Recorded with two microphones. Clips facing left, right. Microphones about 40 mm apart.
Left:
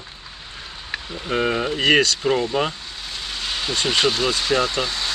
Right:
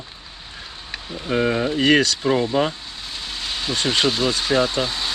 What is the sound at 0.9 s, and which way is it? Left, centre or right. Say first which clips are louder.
Speech: right 1 dB; centre.